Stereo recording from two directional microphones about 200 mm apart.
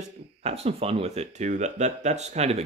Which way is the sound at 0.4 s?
30° right (ahead or behind).